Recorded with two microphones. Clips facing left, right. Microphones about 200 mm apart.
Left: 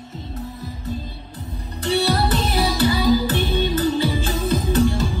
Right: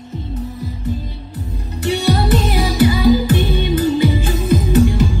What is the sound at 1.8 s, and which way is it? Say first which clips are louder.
Music: right 3 dB; 15° right (ahead or behind).